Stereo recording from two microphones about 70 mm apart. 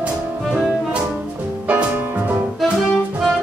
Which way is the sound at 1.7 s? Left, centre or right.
Centre.